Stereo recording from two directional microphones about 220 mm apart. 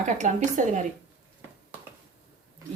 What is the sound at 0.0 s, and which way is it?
Speech, 35° right (ahead or behind).